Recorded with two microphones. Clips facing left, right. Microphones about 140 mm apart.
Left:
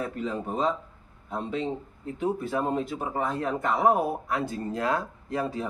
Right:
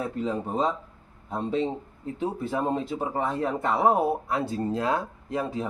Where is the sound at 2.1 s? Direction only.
30° right (ahead or behind).